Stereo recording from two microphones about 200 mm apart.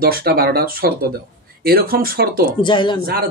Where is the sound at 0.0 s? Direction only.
50° right (ahead or behind).